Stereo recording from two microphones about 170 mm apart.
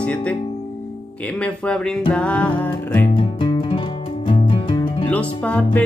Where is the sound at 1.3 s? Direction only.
5° left (ahead or behind).